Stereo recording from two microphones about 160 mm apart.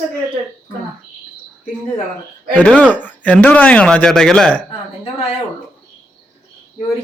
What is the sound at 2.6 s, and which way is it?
Speech, 10° left (ahead or behind).